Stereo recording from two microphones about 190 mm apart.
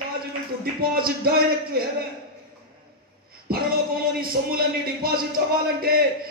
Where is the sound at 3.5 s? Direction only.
50° right (ahead or behind).